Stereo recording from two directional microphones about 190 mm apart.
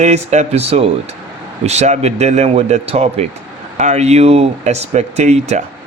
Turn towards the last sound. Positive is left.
turn(degrees=-35)  # may be behind; listen again after turning